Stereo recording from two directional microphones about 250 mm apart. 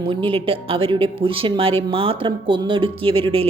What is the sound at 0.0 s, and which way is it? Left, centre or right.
Speech, centre.